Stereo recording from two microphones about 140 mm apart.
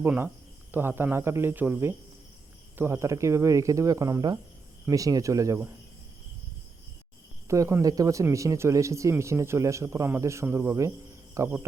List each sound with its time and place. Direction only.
0.0 s a man's voice: 15° right (ahead or behind)
7.4 s a man's voice: 20° right (ahead or behind)